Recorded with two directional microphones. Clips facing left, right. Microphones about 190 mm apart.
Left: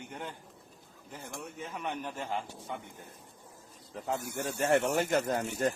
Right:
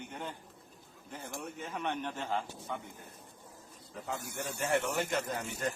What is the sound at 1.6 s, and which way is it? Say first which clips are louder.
A man's voice: right 1 dB; 5° left (ahead or behind).